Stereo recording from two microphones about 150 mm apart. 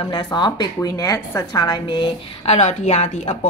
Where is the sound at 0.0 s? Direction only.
30° left (ahead or behind).